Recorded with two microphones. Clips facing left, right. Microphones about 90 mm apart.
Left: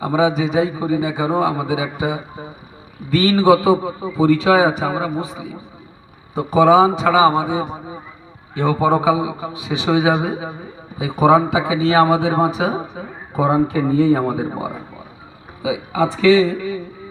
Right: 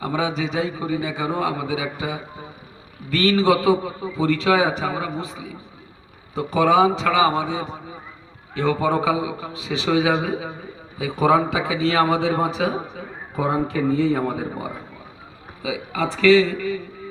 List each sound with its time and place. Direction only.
0.0 s a man's voice: 15° left (ahead or behind)
15.6 s a man's voice: 20° left (ahead or behind)